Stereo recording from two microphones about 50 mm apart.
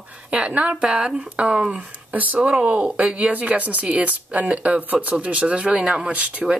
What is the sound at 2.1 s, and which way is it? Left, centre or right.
Speech, right.